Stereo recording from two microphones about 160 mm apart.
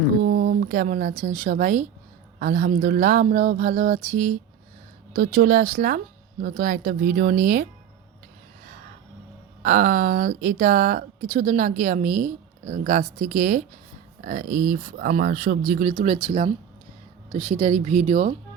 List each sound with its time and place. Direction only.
0.2 s a sound: 50° right (ahead or behind)
0.6 s speech: 65° right (ahead or behind)
5.1 s speech: 65° right (ahead or behind)
9.6 s speech: 55° right (ahead or behind)
14.2 s speech: 60° right (ahead or behind); by 18.3 s 45° right (ahead or behind)